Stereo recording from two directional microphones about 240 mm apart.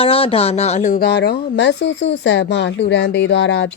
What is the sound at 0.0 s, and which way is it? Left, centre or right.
Speech, left.